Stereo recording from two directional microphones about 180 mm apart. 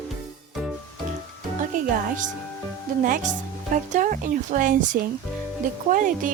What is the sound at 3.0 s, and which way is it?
Speech, 50° right (ahead or behind).